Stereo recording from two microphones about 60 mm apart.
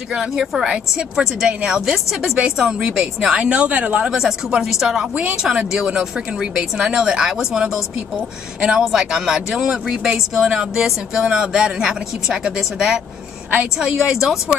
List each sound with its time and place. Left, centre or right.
0.1 s a woman's voice: centre
4.2 s speech: centre
14.0 s speech: centre